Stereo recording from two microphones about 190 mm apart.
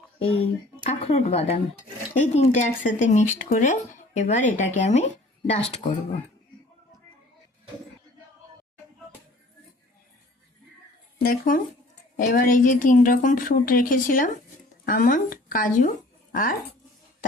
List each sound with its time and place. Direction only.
0.2 s speech: 30° left (ahead or behind)
11.2 s a woman's voice: 50° left (ahead or behind)